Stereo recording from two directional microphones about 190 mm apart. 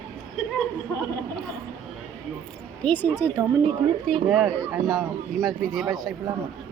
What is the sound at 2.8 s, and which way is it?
Speech, 10° left (ahead or behind).